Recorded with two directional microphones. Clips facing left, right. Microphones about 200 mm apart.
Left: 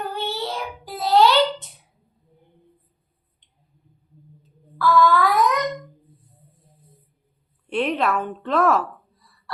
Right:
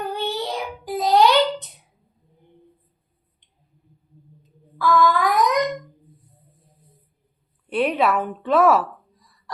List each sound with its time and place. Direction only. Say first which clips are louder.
0.0 s child singing: right 2 dB; 15° right (ahead or behind)
4.8 s a sound: left 1 dB; 15° right (ahead or behind)
7.7 s a woman's voice: right 2 dB; 5° right (ahead or behind)